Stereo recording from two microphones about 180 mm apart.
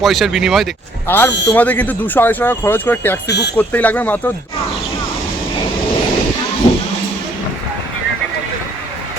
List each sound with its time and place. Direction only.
0.0 s speech: centre (ahead or behind)
1.0 s speech: 10° left (ahead or behind)
3.2 s speech: 65° left (ahead or behind)
3.6 s speech: 10° left (ahead or behind)